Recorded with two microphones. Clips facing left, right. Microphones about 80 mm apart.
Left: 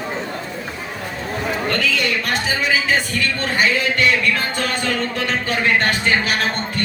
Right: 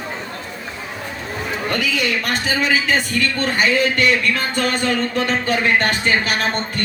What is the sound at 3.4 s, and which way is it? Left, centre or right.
Speech, right.